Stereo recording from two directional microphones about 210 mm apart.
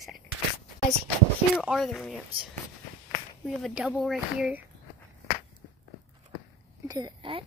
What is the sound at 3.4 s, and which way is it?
Speech, centre (ahead or behind).